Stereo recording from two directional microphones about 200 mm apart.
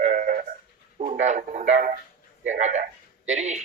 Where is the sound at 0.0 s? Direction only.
40° right (ahead or behind).